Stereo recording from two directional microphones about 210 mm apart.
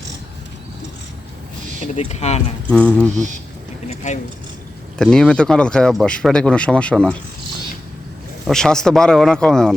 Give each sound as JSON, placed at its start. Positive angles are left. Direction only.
{"t": 2.0, "sound": "speech", "side_deg": 30}
{"t": 2.6, "sound": "speech", "side_deg": 5}
{"t": 3.8, "sound": "a sound", "side_deg": 35}
{"t": 4.9, "sound": "speech", "side_deg": 5}
{"t": 8.4, "sound": "speech", "side_deg": 0}